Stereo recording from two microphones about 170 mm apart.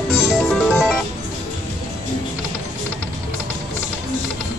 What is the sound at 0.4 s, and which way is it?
Music, 5° left (ahead or behind).